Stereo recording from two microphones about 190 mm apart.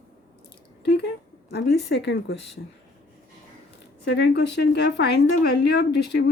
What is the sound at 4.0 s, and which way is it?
A woman's voice, 60° left (ahead or behind).